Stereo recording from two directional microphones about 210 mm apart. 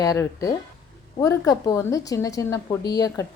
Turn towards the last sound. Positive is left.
turn(degrees=20)  # may be behind; listen again after turning